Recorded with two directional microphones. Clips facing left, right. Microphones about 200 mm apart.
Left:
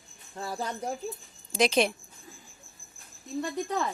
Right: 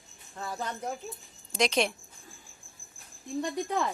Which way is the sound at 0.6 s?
35° left (ahead or behind).